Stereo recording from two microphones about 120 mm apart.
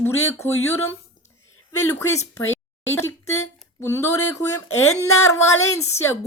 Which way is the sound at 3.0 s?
20° left (ahead or behind).